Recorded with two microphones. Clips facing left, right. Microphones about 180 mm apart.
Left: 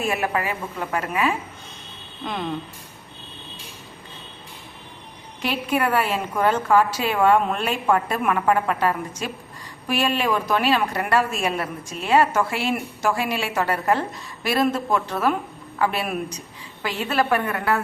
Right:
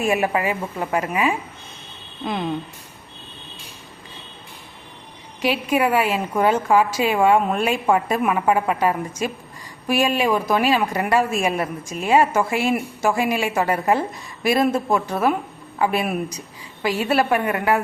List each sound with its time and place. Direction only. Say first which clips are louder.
0.0 s a woman's voice: right 4 dB; 15° right (ahead or behind)
5.4 s a woman's voice: right 3 dB; 10° right (ahead or behind)